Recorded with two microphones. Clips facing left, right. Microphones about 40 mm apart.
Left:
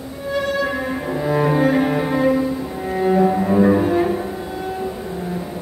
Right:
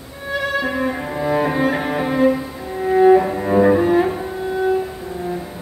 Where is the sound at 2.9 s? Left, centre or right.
Centre.